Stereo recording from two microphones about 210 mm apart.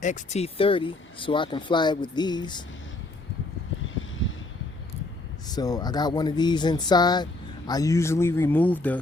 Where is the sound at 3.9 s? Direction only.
65° left (ahead or behind).